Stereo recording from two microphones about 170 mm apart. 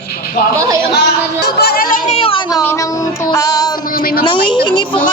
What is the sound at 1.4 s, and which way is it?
Speech, 70° left (ahead or behind).